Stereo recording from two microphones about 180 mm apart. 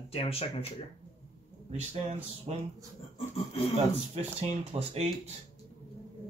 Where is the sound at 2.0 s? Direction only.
40° right (ahead or behind).